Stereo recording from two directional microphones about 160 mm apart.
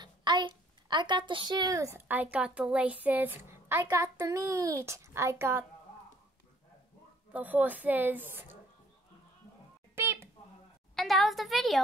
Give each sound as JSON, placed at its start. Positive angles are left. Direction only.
{"t": 0.0, "sound": "a child's voice", "side_deg": -30}
{"t": 7.3, "sound": "a child's voice", "side_deg": -10}
{"t": 9.9, "sound": "a sound", "side_deg": -15}
{"t": 11.0, "sound": "a woman's voice", "side_deg": 0}